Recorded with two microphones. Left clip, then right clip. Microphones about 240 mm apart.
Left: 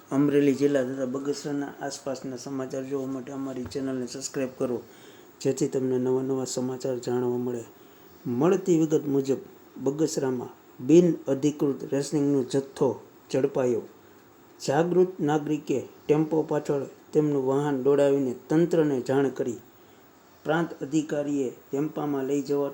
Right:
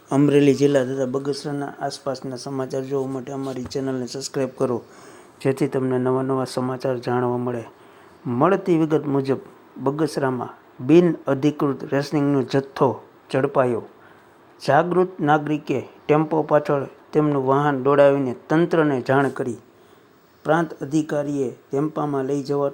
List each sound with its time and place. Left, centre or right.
0.1 s a man's voice: right
5.4 s speech: centre
20.4 s a man's voice: right